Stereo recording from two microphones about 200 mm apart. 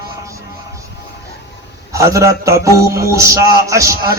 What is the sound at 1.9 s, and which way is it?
A man's voice, 15° right (ahead or behind).